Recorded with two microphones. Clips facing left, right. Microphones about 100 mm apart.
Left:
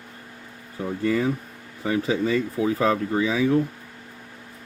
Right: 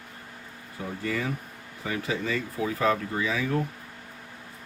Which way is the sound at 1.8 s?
35° left (ahead or behind).